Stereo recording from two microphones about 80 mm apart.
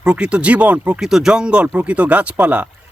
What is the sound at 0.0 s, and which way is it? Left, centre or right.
Speech, centre.